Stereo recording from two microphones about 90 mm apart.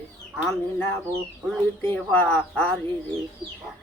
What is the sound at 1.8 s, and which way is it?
Speech, 25° left (ahead or behind).